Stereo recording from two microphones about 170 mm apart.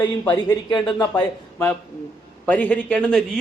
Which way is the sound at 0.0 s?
25° left (ahead or behind).